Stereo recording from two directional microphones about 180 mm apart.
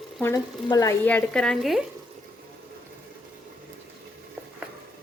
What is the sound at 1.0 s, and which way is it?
Speech, 5° left (ahead or behind).